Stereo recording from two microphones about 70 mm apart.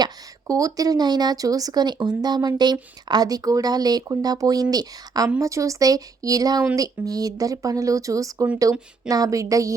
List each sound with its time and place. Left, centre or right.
0.0 s speech: right
3.1 s speech: right
5.4 s speech: right